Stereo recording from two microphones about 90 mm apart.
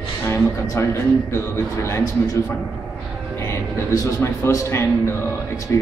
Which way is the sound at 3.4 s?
30° left (ahead or behind).